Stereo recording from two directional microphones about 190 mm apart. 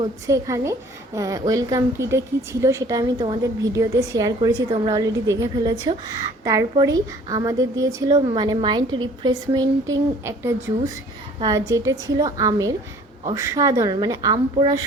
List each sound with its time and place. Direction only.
0.0 s a woman's voice: 15° right (ahead or behind)